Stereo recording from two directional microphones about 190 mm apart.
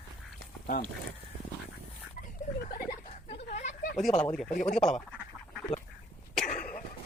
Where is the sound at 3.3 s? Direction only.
35° left (ahead or behind).